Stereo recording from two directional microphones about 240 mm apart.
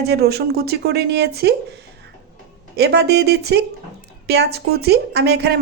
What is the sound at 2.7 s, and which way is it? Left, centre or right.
A woman's voice, right.